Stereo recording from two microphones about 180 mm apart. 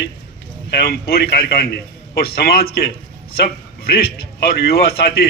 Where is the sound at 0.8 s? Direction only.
60° left (ahead or behind).